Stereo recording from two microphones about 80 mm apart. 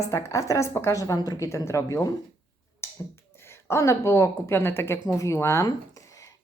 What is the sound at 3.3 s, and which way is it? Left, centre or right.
Speech, left.